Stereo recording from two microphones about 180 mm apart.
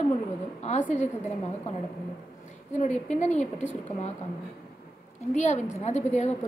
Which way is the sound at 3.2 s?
40° left (ahead or behind).